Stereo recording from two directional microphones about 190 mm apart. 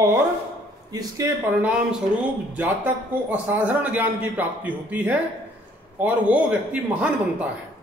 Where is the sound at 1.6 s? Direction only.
5° right (ahead or behind).